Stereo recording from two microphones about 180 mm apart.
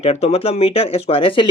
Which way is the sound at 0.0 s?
35° left (ahead or behind).